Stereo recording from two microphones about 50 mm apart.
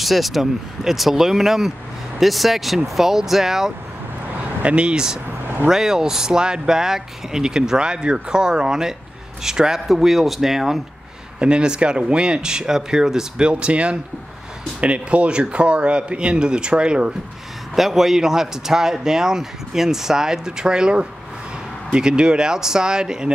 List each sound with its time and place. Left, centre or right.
0.0 s a man's voice: centre
4.6 s a man's voice: right
11.3 s a man's voice: centre
17.7 s a man's voice: centre